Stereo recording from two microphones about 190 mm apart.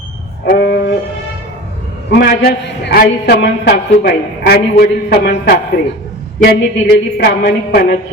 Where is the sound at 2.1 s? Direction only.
60° left (ahead or behind).